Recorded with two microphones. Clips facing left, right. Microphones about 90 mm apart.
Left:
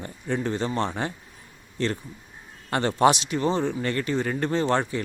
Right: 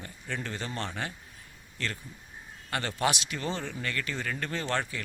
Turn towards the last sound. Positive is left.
turn(degrees=25)  # may be behind; listen again after turning